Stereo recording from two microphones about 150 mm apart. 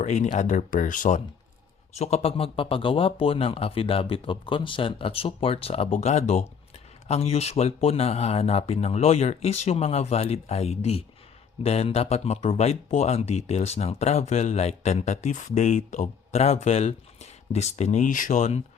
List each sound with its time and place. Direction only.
0.0 s speech: 50° left (ahead or behind)
2.0 s speech: 45° left (ahead or behind)